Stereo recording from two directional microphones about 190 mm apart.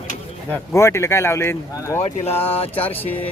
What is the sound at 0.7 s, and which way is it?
Speech, 15° left (ahead or behind).